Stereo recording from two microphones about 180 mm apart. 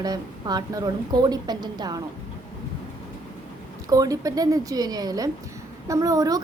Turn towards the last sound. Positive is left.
turn(degrees=-20)  # may be behind; listen again after turning